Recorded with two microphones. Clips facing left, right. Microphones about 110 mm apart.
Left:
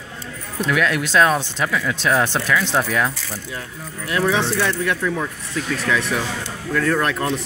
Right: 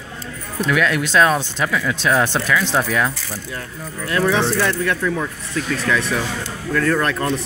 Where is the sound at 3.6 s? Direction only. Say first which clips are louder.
Right 2 dB; 15° left (ahead or behind).